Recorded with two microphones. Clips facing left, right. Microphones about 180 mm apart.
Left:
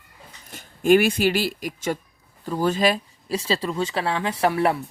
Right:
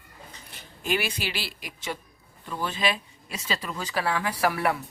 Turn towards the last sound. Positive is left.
turn(degrees=25)  # may be behind; listen again after turning